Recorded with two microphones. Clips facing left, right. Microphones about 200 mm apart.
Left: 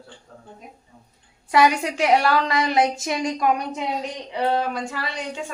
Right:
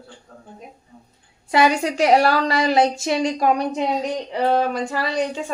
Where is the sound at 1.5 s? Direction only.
30° right (ahead or behind).